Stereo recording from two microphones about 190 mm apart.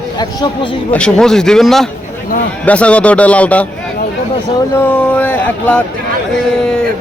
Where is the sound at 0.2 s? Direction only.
25° left (ahead or behind).